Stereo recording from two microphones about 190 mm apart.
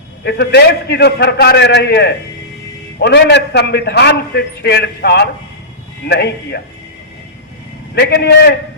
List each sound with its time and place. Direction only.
0.3 s a man's voice: 60° left (ahead or behind)
7.9 s a man's voice: 60° left (ahead or behind)